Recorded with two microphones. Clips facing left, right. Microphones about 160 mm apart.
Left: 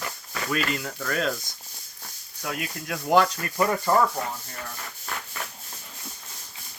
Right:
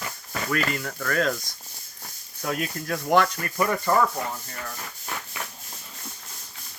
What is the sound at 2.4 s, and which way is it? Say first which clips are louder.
Speech: right 4 dB; 5° left (ahead or behind).